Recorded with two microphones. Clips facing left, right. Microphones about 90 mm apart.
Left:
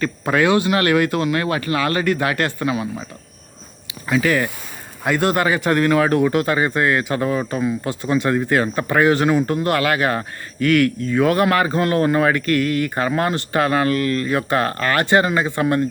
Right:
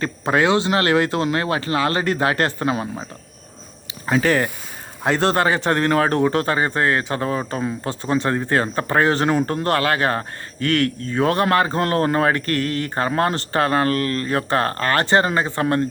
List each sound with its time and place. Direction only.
0.0 s speech: 25° right (ahead or behind)
4.0 s a man's voice: 35° right (ahead or behind)